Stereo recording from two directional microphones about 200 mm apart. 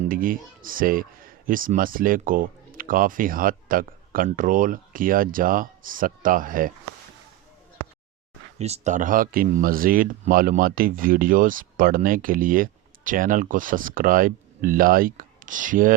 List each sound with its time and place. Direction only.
0.0 s speech: 45° right (ahead or behind)
8.5 s speech: 30° right (ahead or behind)